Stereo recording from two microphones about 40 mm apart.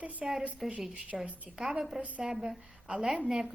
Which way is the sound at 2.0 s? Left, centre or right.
Right.